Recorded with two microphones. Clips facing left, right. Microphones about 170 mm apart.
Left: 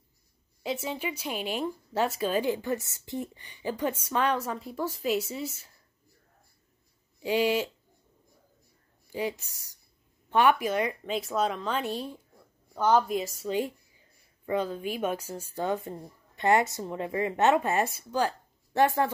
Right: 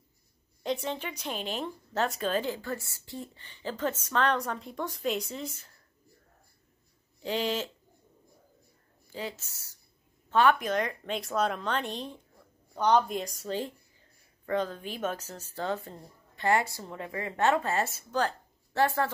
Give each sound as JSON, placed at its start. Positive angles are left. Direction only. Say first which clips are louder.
{"t": 0.7, "sound": "a woman's voice", "louder": "even", "side_deg": 5}
{"t": 7.2, "sound": "a woman's voice", "louder": "left 5 dB", "side_deg": 10}
{"t": 9.1, "sound": "a woman's voice", "louder": "left 6 dB", "side_deg": 15}